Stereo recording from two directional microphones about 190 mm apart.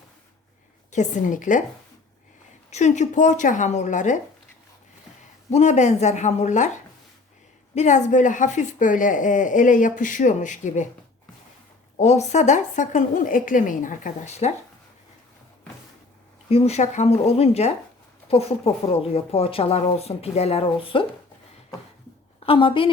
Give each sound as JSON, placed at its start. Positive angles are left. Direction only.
{"t": 0.9, "sound": "a woman's voice", "side_deg": 40}
{"t": 2.6, "sound": "a woman's voice", "side_deg": 40}
{"t": 5.5, "sound": "a woman's voice", "side_deg": 35}
{"t": 7.8, "sound": "a woman's voice", "side_deg": 40}
{"t": 11.9, "sound": "a woman's voice", "side_deg": 35}
{"t": 16.5, "sound": "a woman's voice", "side_deg": 30}
{"t": 22.4, "sound": "a woman's voice", "side_deg": 25}